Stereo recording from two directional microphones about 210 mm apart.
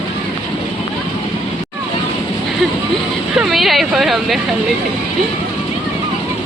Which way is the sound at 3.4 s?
Centre (ahead or behind).